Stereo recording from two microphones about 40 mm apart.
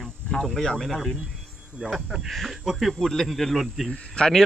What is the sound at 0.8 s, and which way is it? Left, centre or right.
Speech, centre.